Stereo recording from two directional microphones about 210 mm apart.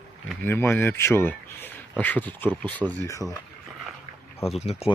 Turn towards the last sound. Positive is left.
turn(degrees=30)  # may be behind; listen again after turning